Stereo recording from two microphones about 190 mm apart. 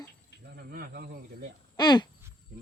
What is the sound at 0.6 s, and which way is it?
Snake, 50° right (ahead or behind).